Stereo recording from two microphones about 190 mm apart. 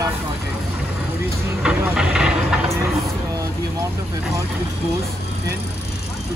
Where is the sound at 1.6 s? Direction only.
5° right (ahead or behind).